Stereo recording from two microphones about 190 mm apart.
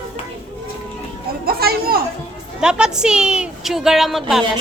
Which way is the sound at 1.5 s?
55° right (ahead or behind).